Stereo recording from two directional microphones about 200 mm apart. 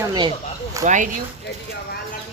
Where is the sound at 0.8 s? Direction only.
40° right (ahead or behind).